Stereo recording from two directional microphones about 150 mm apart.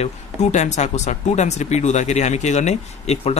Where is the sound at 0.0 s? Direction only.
50° left (ahead or behind).